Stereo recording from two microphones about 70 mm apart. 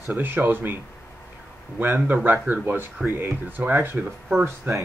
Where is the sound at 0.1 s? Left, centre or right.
Right.